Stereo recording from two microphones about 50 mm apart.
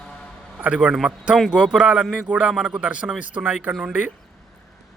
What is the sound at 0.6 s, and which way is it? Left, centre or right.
Speech, right.